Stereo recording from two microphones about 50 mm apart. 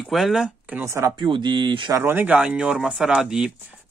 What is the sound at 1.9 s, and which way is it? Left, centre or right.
Speech, right.